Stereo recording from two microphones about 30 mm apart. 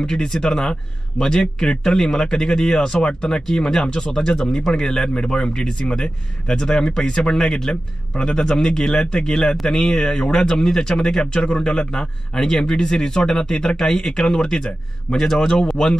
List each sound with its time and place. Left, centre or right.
0.0 s speech: left